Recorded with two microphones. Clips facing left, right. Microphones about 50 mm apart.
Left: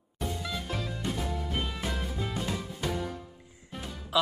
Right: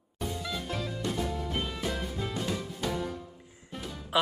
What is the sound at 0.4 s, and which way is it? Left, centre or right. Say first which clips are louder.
Music: even; centre.